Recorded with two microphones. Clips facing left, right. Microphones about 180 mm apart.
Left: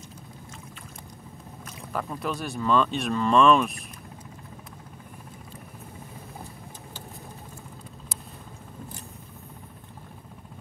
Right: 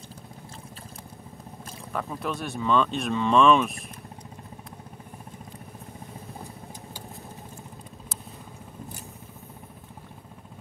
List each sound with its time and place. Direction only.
1.9 s speech: centre (ahead or behind)